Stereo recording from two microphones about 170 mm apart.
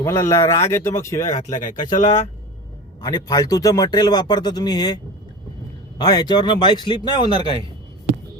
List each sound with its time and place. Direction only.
0.0 s speech: 15° left (ahead or behind)
1.4 s speech: 45° left (ahead or behind)
3.0 s speech: 20° left (ahead or behind)
6.0 s speech: 25° left (ahead or behind)